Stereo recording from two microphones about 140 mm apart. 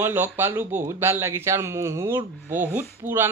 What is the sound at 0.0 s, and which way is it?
A man's voice, 15° right (ahead or behind).